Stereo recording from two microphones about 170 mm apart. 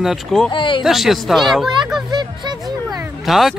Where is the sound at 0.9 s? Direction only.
Centre (ahead or behind).